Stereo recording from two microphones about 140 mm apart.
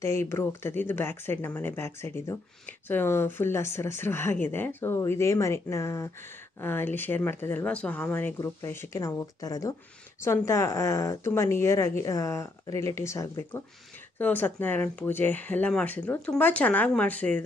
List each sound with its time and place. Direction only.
0.0 s speech: 20° left (ahead or behind)
8.4 s speech: 20° left (ahead or behind)